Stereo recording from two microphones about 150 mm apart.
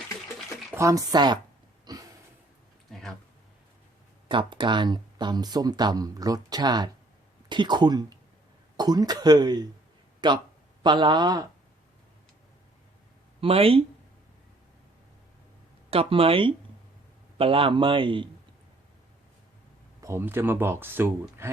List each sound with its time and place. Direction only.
0.7 s speech: 20° right (ahead or behind)
1.9 s a sound: 25° right (ahead or behind)
2.9 s a sound: centre (ahead or behind)
4.3 s a man's voice: 35° right (ahead or behind)
13.4 s a man's voice: 40° right (ahead or behind)
15.9 s a man's voice: 40° right (ahead or behind)
20.0 s speech: 15° right (ahead or behind)